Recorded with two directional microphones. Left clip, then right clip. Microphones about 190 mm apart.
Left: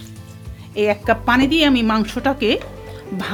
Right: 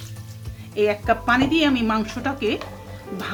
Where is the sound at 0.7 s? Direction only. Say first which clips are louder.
Left 3 dB; 40° left (ahead or behind).